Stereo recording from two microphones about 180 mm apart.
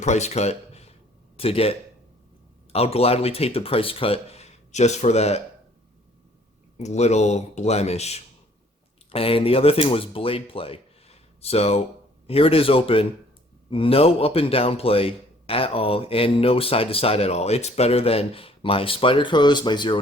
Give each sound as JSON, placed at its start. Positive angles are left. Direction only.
{"t": 0.0, "sound": "speech", "side_deg": 40}
{"t": 2.7, "sound": "speech", "side_deg": 35}
{"t": 6.7, "sound": "speech", "side_deg": 40}